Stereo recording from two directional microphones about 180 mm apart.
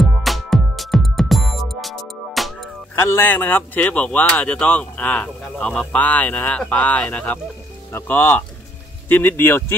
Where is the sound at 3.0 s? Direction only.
10° left (ahead or behind).